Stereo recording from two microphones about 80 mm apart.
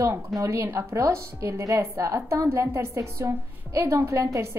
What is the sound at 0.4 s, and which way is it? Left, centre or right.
A woman's voice, right.